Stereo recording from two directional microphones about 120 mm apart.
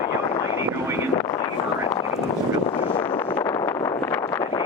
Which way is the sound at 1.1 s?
40° left (ahead or behind).